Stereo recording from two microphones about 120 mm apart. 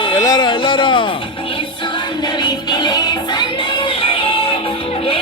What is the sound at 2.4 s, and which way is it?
Music, 35° left (ahead or behind).